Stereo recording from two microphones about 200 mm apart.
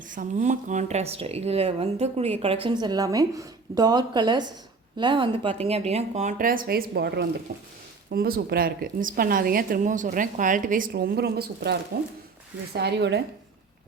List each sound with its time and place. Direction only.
0.1 s a woman's voice: 40° right (ahead or behind); by 13.2 s 60° right (ahead or behind)